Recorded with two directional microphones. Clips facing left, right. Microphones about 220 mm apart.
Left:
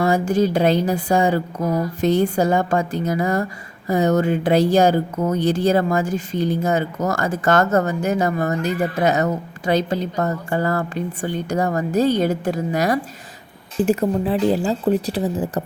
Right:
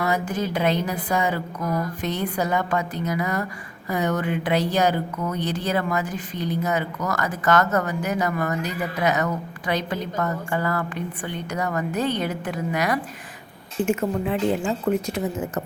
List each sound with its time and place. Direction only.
0.0 s speech: 30° left (ahead or behind)
5.1 s speech: 45° left (ahead or behind)
5.4 s speech: 30° left (ahead or behind)
11.9 s speech: 40° left (ahead or behind)